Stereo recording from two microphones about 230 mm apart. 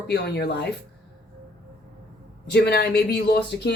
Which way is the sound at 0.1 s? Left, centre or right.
Left.